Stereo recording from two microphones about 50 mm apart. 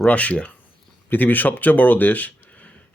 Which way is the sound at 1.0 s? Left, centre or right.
Left.